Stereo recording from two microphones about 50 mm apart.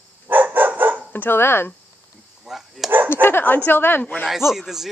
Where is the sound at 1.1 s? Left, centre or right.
Left.